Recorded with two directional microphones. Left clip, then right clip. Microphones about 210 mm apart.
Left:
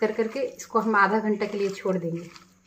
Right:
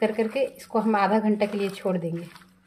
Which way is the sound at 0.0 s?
10° right (ahead or behind).